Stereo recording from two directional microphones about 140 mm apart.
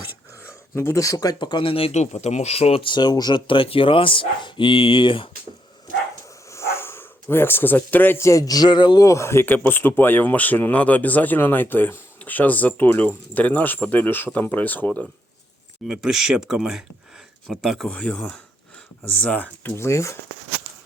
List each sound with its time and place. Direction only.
0.4 s speech: 20° left (ahead or behind); by 5.3 s 35° left (ahead or behind)
6.5 s speech: 20° left (ahead or behind)
15.9 s speech: 5° right (ahead or behind); by 20.1 s 20° left (ahead or behind)